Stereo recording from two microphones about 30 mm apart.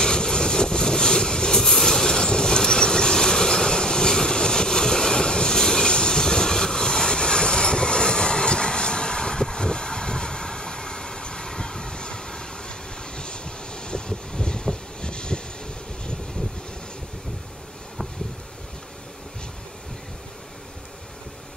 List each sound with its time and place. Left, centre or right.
0.0 s vehicle: left
1.6 s train: centre; by 15.4 s left